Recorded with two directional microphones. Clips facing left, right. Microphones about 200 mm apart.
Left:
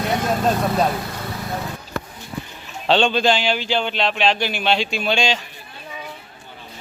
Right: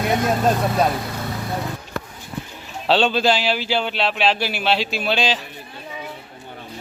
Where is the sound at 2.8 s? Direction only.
5° right (ahead or behind).